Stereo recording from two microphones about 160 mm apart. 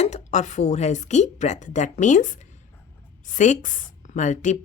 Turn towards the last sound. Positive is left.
turn(degrees=50)  # may be behind; listen again after turning